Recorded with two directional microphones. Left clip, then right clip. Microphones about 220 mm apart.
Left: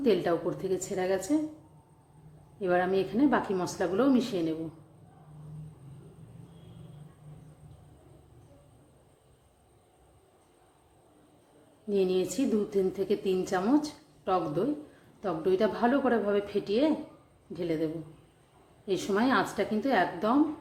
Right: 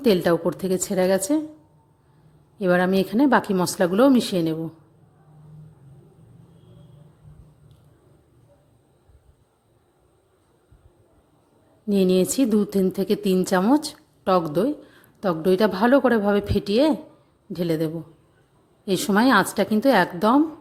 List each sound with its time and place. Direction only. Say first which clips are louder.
0.0 s a woman's voice: right 7 dB; 50° right (ahead or behind)
2.6 s a woman's voice: right 7 dB; 50° right (ahead or behind)
11.9 s a woman's voice: right 7 dB; 50° right (ahead or behind)